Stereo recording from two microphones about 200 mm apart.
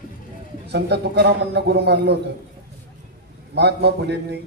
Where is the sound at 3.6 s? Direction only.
55° right (ahead or behind).